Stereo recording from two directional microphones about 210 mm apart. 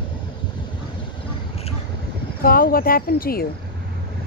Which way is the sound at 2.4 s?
45° left (ahead or behind).